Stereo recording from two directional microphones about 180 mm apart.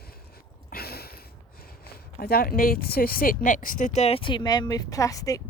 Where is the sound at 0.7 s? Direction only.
60° left (ahead or behind).